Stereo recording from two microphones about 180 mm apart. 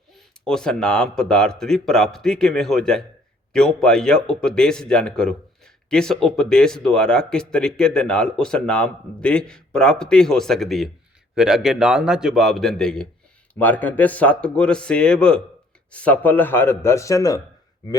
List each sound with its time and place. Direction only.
0.4 s a man's voice: 5° left (ahead or behind)